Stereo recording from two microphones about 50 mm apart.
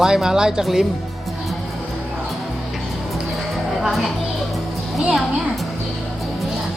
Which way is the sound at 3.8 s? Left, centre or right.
Centre.